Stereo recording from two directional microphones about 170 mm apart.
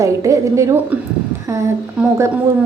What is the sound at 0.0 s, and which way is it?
Speech, 20° right (ahead or behind).